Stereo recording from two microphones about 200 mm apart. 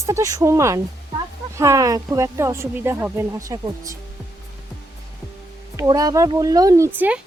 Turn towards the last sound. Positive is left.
turn(degrees=-10)  # may be behind; listen again after turning